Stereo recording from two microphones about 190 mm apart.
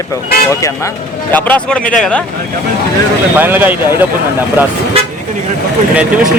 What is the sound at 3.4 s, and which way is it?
Speech, 10° right (ahead or behind).